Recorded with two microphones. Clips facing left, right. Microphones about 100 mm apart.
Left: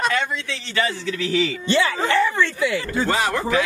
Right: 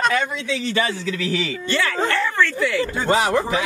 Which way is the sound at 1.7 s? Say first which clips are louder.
Left 1 dB; 20° left (ahead or behind).